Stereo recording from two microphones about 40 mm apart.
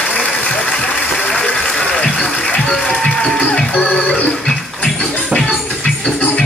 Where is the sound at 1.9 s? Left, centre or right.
Left.